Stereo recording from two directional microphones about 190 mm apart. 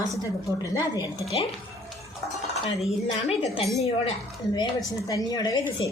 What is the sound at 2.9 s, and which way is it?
Speech, 35° left (ahead or behind).